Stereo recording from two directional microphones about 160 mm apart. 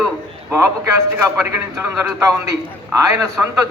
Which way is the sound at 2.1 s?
20° right (ahead or behind).